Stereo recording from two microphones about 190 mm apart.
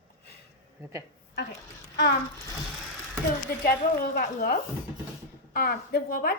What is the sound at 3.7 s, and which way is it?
A woman's voice, 55° left (ahead or behind).